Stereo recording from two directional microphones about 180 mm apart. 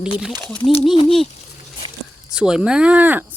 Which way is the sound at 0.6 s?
30° left (ahead or behind).